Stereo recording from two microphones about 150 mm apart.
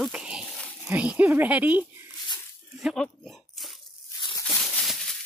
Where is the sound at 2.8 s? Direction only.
Centre (ahead or behind).